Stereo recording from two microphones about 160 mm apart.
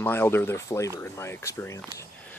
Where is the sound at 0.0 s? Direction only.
15° left (ahead or behind).